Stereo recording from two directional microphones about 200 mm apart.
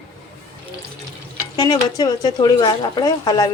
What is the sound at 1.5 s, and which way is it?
Speech, 20° left (ahead or behind).